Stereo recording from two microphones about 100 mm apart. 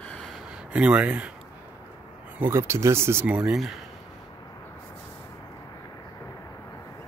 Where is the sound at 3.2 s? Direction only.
10° right (ahead or behind).